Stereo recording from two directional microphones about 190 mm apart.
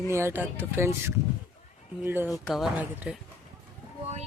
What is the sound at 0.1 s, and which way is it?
Speech, 15° right (ahead or behind).